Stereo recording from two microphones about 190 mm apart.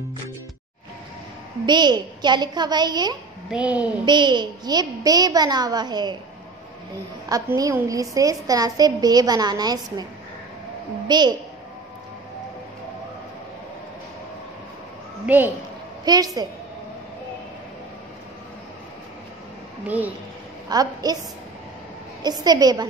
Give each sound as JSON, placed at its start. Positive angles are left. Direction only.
{"t": 1.7, "sound": "a woman's voice", "side_deg": -25}
{"t": 3.4, "sound": "a woman's voice", "side_deg": -5}
{"t": 4.0, "sound": "a woman's voice", "side_deg": -25}
{"t": 7.2, "sound": "a woman's voice", "side_deg": -20}
{"t": 11.1, "sound": "a woman's voice", "side_deg": -20}
{"t": 15.2, "sound": "a woman's voice", "side_deg": -10}
{"t": 16.1, "sound": "a woman's voice", "side_deg": -20}
{"t": 20.6, "sound": "a woman's voice", "side_deg": -20}
{"t": 22.2, "sound": "a woman's voice", "side_deg": -20}